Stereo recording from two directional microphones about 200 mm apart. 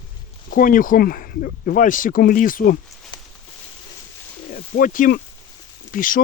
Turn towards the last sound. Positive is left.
turn(degrees=45)  # may be behind; listen again after turning